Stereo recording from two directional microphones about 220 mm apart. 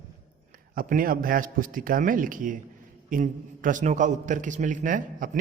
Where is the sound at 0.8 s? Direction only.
40° right (ahead or behind).